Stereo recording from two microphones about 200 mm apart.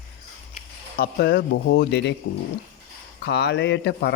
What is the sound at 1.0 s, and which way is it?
Speech, 55° left (ahead or behind).